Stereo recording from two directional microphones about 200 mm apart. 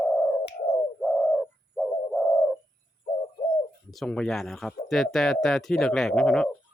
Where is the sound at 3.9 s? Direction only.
5° left (ahead or behind).